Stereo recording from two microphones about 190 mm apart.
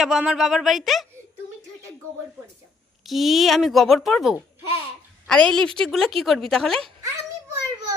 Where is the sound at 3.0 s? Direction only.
Centre (ahead or behind).